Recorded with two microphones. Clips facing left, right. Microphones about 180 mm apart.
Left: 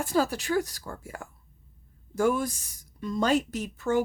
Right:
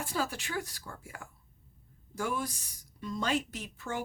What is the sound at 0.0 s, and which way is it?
A woman's voice, 40° left (ahead or behind).